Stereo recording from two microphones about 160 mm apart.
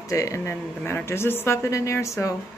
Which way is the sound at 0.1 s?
20° left (ahead or behind).